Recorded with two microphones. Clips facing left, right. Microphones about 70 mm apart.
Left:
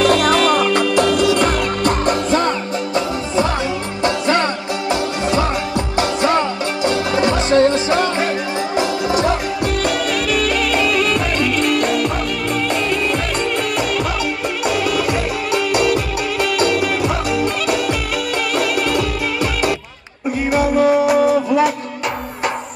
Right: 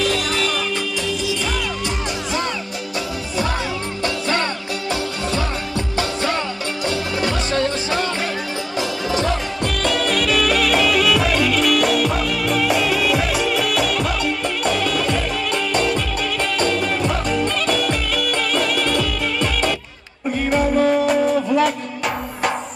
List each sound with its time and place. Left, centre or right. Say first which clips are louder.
0.0 s music: left 7 dB; left
4.0 s music: left 6 dB; left
5.9 s music: left 6 dB; left
10.1 s music: even; centre